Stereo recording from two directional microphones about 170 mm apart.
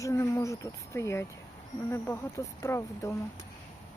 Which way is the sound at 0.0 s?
20° left (ahead or behind).